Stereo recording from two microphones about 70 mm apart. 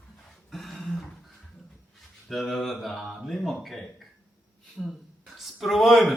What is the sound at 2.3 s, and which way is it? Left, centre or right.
A man's voice, centre.